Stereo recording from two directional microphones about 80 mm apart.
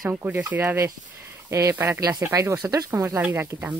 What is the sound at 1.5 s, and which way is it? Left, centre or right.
Speech, right.